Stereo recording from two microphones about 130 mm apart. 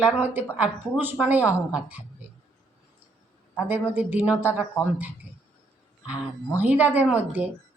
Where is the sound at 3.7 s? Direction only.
15° right (ahead or behind).